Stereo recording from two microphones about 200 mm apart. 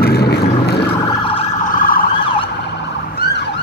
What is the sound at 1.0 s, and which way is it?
Emergency vehicle, 25° left (ahead or behind).